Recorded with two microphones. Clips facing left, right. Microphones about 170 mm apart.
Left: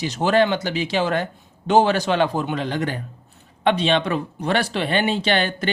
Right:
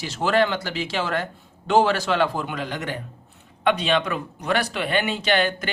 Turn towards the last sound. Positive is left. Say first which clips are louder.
# left 1 dB
turn(degrees=30)  # may be behind; listen again after turning